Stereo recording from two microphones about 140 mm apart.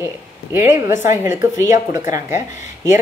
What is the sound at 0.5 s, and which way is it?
A woman's voice, 15° right (ahead or behind).